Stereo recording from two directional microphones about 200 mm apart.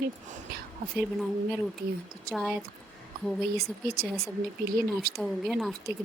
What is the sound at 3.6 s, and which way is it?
Speech, 50° right (ahead or behind).